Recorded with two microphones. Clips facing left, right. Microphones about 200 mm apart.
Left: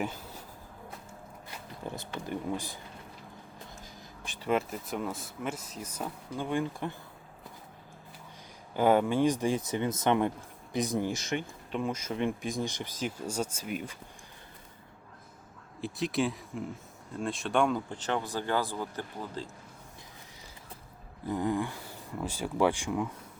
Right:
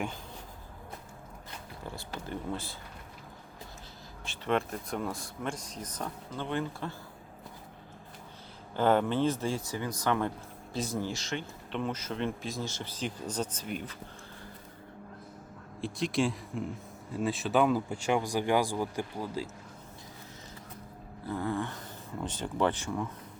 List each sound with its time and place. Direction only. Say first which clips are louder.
2.2 s speech: left 2 dB; 15° left (ahead or behind)
4.4 s speech: left 1 dB; 5° left (ahead or behind)
8.7 s speech: left 2 dB; 10° left (ahead or behind)
15.8 s speech: even; centre (ahead or behind)
21.2 s speech: left 3 dB; 15° left (ahead or behind)